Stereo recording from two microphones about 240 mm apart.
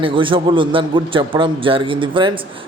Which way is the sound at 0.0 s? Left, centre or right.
Right.